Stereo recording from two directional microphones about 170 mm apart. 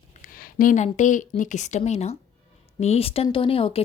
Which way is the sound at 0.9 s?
50° left (ahead or behind).